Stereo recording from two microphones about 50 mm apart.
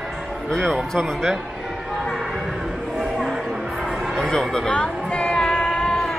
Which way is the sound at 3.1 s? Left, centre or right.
Centre.